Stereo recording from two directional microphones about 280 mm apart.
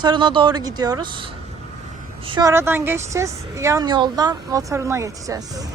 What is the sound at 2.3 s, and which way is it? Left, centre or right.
A woman's voice, centre.